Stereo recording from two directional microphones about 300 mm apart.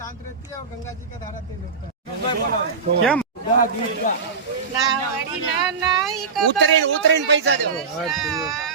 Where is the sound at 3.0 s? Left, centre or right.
Centre.